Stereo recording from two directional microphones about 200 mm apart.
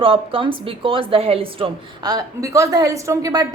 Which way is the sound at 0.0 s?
25° right (ahead or behind).